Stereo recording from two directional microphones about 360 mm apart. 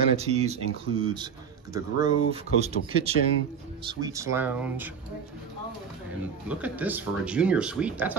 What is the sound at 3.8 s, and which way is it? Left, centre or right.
Speech, centre.